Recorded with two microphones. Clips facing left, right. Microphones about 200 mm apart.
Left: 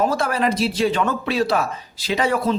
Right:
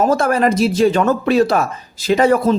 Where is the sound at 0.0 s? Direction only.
45° right (ahead or behind).